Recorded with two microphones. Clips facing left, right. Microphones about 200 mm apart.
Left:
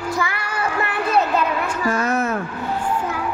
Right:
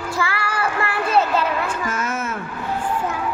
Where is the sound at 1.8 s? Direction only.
35° left (ahead or behind).